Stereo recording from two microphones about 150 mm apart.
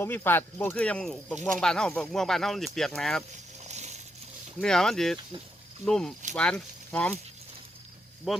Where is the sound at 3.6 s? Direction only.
50° right (ahead or behind).